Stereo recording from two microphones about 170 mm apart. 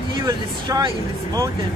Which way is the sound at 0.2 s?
25° right (ahead or behind).